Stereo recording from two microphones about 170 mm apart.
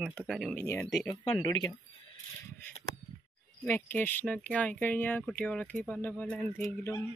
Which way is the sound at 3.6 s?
10° left (ahead or behind).